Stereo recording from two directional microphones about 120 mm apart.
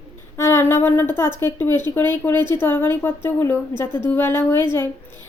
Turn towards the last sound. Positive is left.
turn(degrees=20)  # may be behind; listen again after turning